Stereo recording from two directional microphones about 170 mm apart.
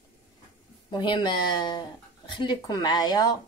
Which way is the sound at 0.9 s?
25° left (ahead or behind).